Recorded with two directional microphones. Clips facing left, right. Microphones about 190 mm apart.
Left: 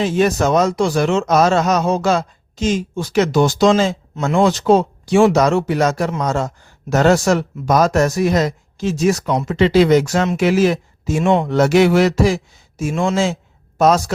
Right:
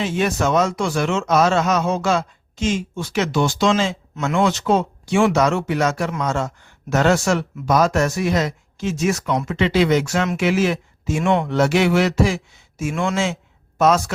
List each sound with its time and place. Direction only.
0.0 s speech: 40° left (ahead or behind)
11.4 s speech: 40° left (ahead or behind)